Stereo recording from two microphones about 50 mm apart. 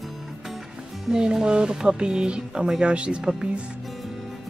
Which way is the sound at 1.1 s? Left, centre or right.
Centre.